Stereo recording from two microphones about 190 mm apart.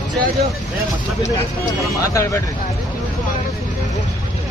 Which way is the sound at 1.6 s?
15° left (ahead or behind).